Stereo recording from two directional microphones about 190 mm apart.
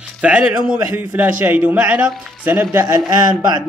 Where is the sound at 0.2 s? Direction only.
5° right (ahead or behind).